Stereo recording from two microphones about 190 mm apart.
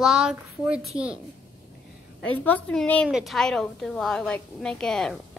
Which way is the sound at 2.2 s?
5° left (ahead or behind).